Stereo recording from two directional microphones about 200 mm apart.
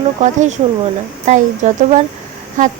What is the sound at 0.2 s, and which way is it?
A woman's voice, 35° right (ahead or behind).